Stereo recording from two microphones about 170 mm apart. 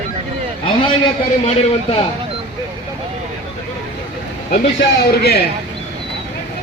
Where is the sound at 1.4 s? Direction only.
35° left (ahead or behind).